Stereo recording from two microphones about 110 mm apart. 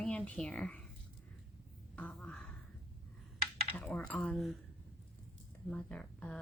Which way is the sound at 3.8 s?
10° left (ahead or behind).